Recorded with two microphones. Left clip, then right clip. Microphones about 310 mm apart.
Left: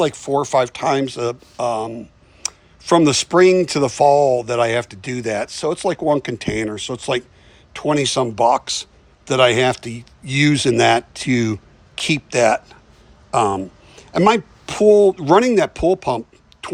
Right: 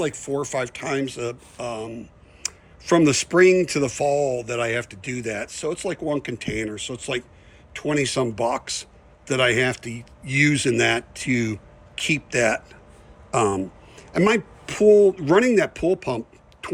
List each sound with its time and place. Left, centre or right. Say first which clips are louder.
0.0 s speech: left 7 dB; centre